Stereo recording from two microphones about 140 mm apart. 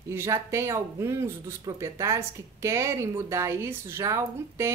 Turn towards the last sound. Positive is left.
turn(degrees=-20)  # may be behind; listen again after turning